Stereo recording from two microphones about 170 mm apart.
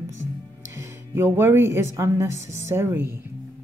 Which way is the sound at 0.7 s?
15° right (ahead or behind).